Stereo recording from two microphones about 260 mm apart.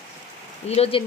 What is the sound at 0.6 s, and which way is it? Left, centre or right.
Speech, left.